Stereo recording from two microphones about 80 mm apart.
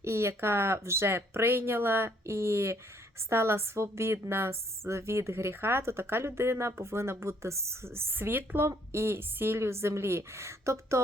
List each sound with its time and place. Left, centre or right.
0.0 s a woman's voice: right